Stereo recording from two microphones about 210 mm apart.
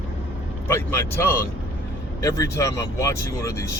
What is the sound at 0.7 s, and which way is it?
Speech, 10° left (ahead or behind).